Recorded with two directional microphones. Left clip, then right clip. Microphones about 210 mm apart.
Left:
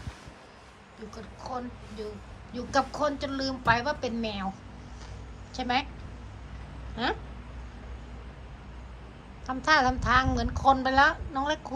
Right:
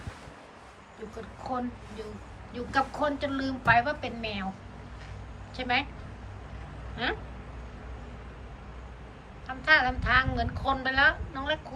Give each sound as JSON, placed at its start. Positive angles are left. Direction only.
{"t": 1.5, "sound": "a woman's voice", "side_deg": 15}
{"t": 5.5, "sound": "a woman's voice", "side_deg": 15}
{"t": 6.9, "sound": "a sound", "side_deg": 15}
{"t": 9.6, "sound": "a woman's voice", "side_deg": 20}